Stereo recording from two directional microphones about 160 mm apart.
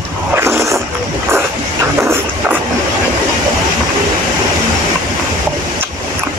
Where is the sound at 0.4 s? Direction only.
15° right (ahead or behind).